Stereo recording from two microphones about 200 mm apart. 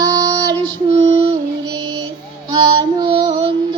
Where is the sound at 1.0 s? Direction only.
30° right (ahead or behind).